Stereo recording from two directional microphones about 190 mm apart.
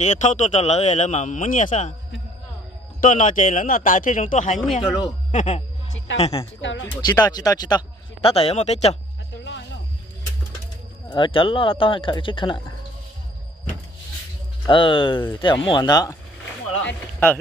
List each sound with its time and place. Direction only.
0.0 s a man's voice: 40° left (ahead or behind)
3.0 s a man's voice: 40° left (ahead or behind)
5.3 s music: 40° left (ahead or behind)
6.1 s a man's voice: 35° left (ahead or behind)
6.6 s speech: 75° left (ahead or behind)
7.2 s speech: 20° left (ahead or behind); by 8.9 s 35° left (ahead or behind)
11.1 s speech: 25° left (ahead or behind)
14.7 s speech: 25° left (ahead or behind); by 17.4 s 10° left (ahead or behind)